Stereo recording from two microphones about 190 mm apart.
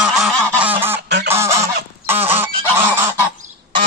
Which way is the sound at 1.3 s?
15° right (ahead or behind).